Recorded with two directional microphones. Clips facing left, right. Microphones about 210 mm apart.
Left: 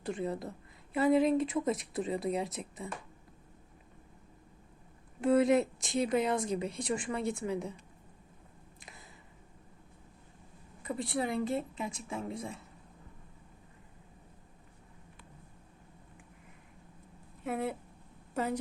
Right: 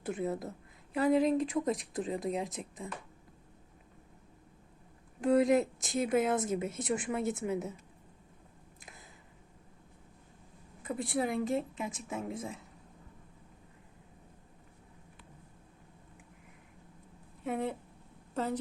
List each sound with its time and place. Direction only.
0.0 s speech: 5° right (ahead or behind)
5.2 s speech: centre (ahead or behind)
8.8 s a sound: centre (ahead or behind)
10.8 s speech: centre (ahead or behind)
17.4 s speech: 5° left (ahead or behind)